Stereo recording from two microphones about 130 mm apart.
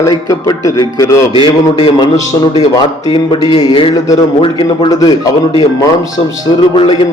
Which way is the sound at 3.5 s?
40° left (ahead or behind).